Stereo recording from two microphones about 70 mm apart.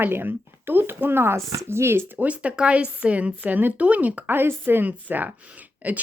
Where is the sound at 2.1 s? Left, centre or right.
Centre.